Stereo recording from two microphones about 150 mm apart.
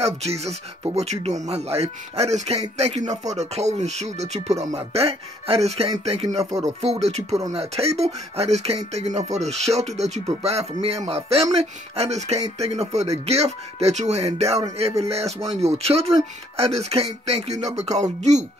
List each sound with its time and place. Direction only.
0.0 s speech: 45° right (ahead or behind)